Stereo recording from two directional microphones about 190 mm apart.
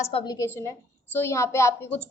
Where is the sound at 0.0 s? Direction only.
30° left (ahead or behind).